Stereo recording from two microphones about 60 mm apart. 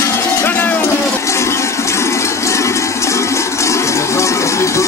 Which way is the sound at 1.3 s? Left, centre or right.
Left.